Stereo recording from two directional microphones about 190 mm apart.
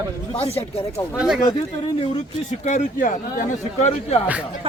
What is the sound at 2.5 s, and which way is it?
Speech, 40° left (ahead or behind).